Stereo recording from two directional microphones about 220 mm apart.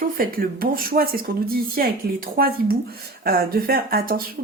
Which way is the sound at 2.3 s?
40° right (ahead or behind).